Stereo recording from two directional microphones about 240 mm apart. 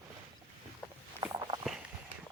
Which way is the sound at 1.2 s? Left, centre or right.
Centre.